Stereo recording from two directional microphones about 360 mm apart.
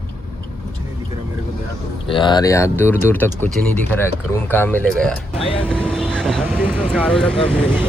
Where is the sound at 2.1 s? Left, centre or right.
Centre.